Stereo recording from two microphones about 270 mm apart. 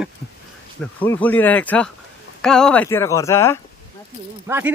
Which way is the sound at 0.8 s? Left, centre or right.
Centre.